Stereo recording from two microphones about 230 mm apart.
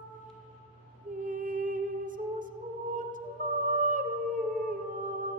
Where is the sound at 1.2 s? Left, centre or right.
Right.